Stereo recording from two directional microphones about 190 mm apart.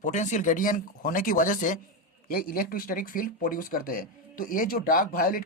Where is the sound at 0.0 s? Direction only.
40° left (ahead or behind).